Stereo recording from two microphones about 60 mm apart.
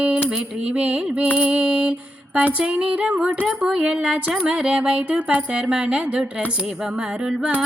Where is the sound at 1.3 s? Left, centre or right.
Centre.